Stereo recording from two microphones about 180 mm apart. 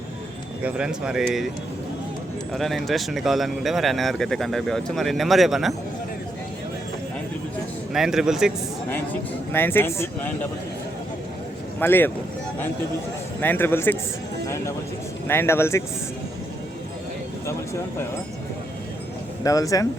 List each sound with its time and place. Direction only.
0.6 s speech: 5° right (ahead or behind)
2.5 s speech: centre (ahead or behind)
7.9 s speech: centre (ahead or behind)
9.5 s speech: 10° left (ahead or behind)
11.8 s speech: 10° left (ahead or behind)
13.4 s speech: 10° left (ahead or behind)
17.4 s speech: 15° left (ahead or behind)
19.5 s speech: 20° left (ahead or behind)